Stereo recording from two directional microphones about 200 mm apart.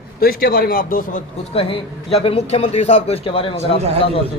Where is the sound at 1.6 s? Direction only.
25° left (ahead or behind).